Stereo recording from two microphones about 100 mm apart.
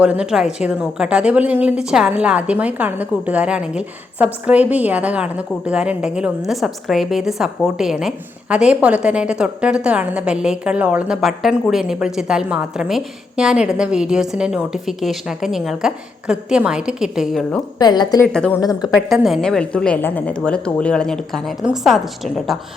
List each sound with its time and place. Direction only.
0.0 s a woman's voice: 10° right (ahead or behind)
17.7 s a woman's voice: 45° left (ahead or behind)
18.3 s a woman's voice: 5° left (ahead or behind)
18.6 s a woman's voice: 40° left (ahead or behind)
18.9 s a woman's voice: 5° right (ahead or behind)